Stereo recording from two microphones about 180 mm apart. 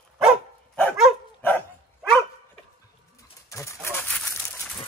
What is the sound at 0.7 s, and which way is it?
Dog, 5° left (ahead or behind).